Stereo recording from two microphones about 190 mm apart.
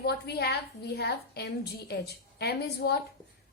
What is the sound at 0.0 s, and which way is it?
A woman's voice, 60° left (ahead or behind).